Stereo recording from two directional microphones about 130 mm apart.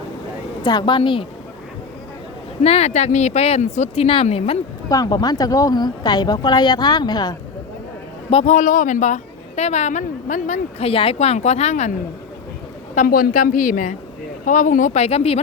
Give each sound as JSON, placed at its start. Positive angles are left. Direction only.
{"t": 0.6, "sound": "speech", "side_deg": 35}
{"t": 2.6, "sound": "speech", "side_deg": 55}
{"t": 4.9, "sound": "speech", "side_deg": 30}
{"t": 8.3, "sound": "a man's voice", "side_deg": 45}
{"t": 8.5, "sound": "a woman's voice", "side_deg": 90}
{"t": 10.8, "sound": "speech", "side_deg": 50}
{"t": 12.9, "sound": "a woman's voice", "side_deg": 80}